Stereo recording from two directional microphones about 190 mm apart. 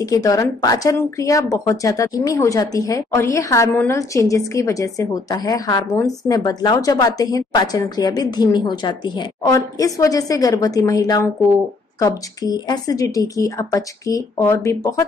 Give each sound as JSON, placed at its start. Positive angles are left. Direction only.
{"t": 0.0, "sound": "speech", "side_deg": 20}